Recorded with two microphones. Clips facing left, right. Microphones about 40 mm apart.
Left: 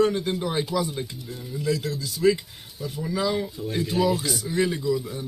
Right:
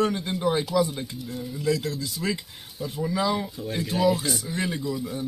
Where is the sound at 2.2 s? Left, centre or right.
Centre.